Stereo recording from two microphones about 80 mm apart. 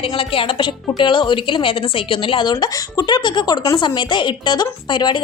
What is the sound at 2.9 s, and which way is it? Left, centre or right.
Speech, left.